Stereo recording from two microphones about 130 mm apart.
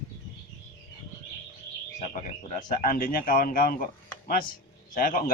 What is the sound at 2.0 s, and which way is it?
A man's voice, 70° left (ahead or behind).